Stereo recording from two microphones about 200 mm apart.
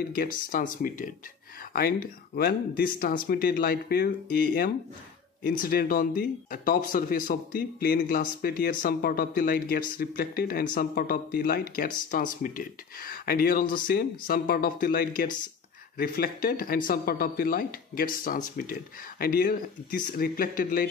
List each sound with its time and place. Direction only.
0.5 s speech: 45° left (ahead or behind)
5.4 s speech: 45° left (ahead or behind)